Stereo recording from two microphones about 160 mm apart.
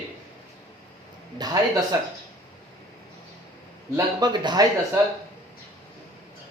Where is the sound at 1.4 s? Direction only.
25° right (ahead or behind).